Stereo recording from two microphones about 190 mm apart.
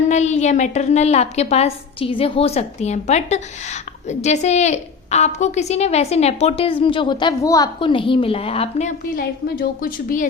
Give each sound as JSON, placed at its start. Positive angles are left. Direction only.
{"t": 0.1, "sound": "a woman's voice", "side_deg": 35}
{"t": 9.1, "sound": "a woman's voice", "side_deg": 50}